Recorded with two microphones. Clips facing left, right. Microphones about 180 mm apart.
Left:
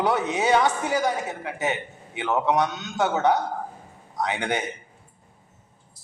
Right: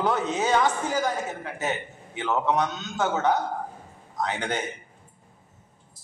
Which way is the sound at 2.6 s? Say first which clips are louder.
Left 2 dB; 70° left (ahead or behind).